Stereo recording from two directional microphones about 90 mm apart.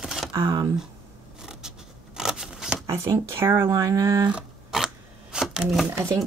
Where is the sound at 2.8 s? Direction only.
30° right (ahead or behind).